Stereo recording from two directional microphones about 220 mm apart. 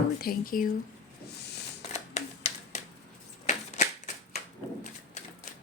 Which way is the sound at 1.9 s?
30° left (ahead or behind).